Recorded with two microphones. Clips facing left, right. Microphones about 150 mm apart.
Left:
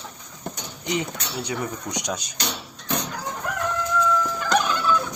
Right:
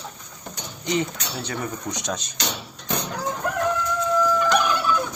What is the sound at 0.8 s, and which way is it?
Speech, 15° left (ahead or behind).